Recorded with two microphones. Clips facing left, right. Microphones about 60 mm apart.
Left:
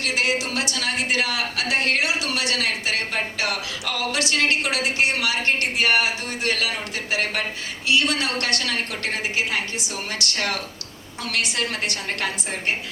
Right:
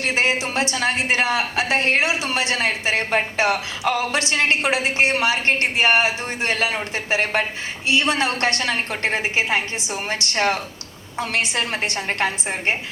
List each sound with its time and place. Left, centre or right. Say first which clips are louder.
0.0 s a woman's voice: right 3 dB; right